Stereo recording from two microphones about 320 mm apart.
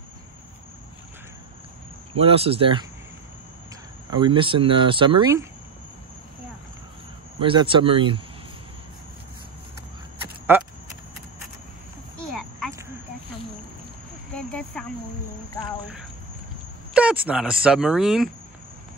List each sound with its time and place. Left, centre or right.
2.1 s speech: centre
4.1 s speech: centre
7.3 s speech: centre
10.5 s speech: centre
12.4 s a sound: centre
14.3 s a sound: centre
16.9 s speech: centre